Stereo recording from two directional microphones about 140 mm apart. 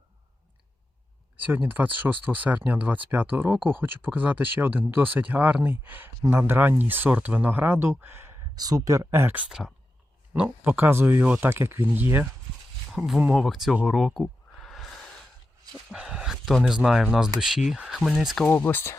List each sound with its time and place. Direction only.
1.4 s speech: 15° right (ahead or behind)
8.5 s speech: 25° right (ahead or behind)
12.9 s speech: 5° right (ahead or behind)
18.4 s speech: 15° left (ahead or behind)